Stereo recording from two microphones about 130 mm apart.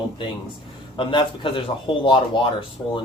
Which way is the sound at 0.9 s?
40° left (ahead or behind).